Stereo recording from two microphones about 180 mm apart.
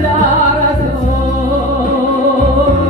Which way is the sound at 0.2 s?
45° left (ahead or behind).